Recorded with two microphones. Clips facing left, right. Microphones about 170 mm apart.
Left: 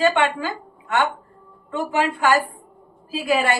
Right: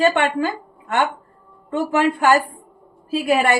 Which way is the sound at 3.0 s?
45° right (ahead or behind).